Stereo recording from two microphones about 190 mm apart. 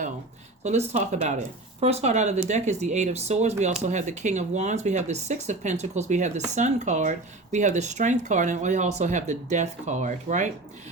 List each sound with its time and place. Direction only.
0.6 s speech: 35° right (ahead or behind)